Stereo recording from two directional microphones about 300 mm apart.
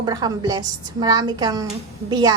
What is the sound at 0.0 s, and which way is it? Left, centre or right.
A woman's voice, centre.